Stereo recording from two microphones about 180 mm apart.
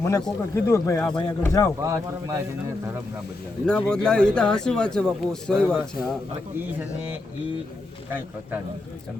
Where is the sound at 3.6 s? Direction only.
5° left (ahead or behind).